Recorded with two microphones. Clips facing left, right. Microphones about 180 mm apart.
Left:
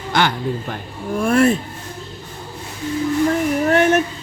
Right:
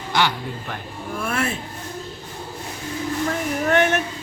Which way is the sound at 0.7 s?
40° left (ahead or behind).